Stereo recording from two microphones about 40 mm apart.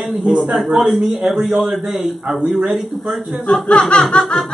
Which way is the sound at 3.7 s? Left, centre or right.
Left.